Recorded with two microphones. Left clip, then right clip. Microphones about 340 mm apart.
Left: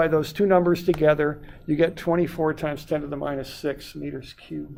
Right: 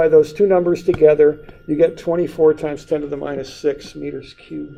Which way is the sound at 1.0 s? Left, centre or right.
Left.